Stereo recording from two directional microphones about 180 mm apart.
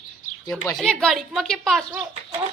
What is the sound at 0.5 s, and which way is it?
A woman's voice, centre (ahead or behind).